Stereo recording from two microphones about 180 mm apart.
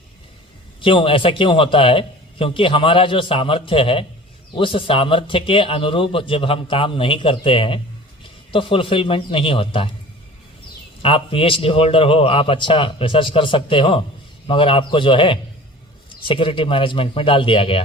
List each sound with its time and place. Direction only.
0.8 s a man's voice: 30° left (ahead or behind)
11.0 s a man's voice: 30° left (ahead or behind)